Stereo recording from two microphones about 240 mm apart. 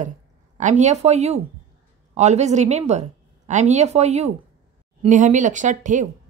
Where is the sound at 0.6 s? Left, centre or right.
Right.